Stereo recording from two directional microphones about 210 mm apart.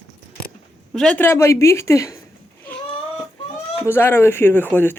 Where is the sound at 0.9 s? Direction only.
5° left (ahead or behind).